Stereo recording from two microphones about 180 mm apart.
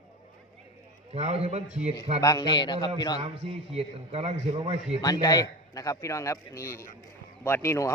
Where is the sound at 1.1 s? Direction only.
35° right (ahead or behind).